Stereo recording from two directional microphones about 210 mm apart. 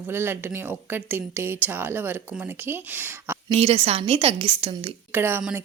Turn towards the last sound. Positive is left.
turn(degrees=-10)  # may be behind; listen again after turning